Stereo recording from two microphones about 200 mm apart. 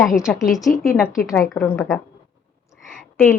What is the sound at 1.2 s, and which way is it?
Speech, 10° left (ahead or behind).